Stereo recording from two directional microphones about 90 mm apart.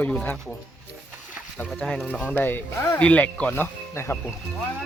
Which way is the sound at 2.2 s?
15° left (ahead or behind).